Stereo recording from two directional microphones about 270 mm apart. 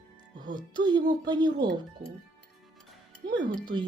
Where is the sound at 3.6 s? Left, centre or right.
Centre.